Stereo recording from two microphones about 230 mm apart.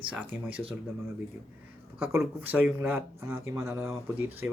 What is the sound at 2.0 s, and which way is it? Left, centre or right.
Speech, centre.